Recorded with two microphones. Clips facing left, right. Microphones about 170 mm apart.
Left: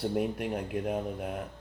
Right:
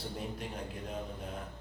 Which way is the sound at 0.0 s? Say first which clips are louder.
Left 10 dB; 65° left (ahead or behind).